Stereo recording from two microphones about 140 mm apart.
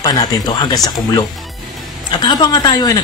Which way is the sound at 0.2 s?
30° left (ahead or behind).